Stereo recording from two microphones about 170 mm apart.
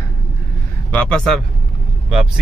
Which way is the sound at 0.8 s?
5° left (ahead or behind).